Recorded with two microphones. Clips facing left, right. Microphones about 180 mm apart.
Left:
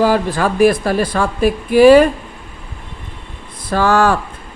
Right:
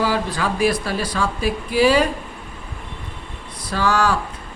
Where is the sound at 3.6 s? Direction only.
55° left (ahead or behind).